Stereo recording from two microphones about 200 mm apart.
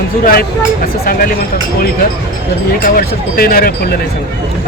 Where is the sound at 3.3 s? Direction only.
50° left (ahead or behind).